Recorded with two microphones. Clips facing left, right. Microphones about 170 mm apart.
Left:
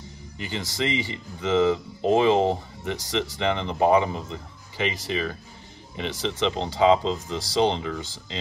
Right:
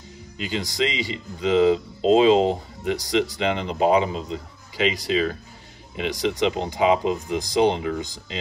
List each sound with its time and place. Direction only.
0.4 s speech: 15° right (ahead or behind)